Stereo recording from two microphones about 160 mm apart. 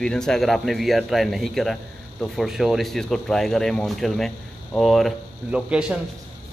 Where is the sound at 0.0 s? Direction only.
5° left (ahead or behind).